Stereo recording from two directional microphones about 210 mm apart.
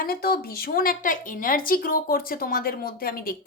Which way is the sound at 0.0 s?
45° left (ahead or behind).